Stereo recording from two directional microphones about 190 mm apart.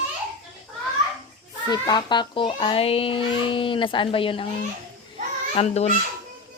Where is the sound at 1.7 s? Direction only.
20° left (ahead or behind).